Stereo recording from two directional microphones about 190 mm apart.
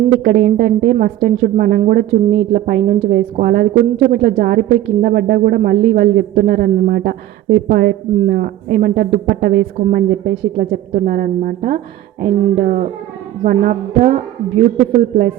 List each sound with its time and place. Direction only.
0.3 s speech: 45° right (ahead or behind)